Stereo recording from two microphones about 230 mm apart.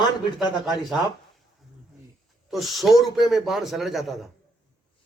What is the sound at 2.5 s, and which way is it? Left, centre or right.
A man's voice, centre.